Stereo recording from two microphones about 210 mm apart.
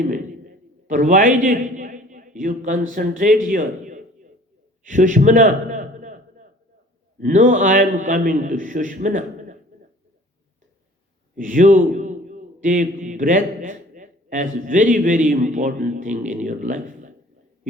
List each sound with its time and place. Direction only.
0.1 s a man's voice: 40° right (ahead or behind)
4.8 s a sound: 35° right (ahead or behind)
7.2 s a man's voice: 40° right (ahead or behind)
11.3 s a man's voice: 40° right (ahead or behind)